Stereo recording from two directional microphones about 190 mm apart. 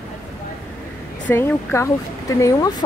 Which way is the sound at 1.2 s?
10° left (ahead or behind).